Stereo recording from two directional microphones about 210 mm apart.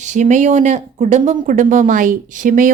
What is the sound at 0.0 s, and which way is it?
A woman's voice, 35° right (ahead or behind).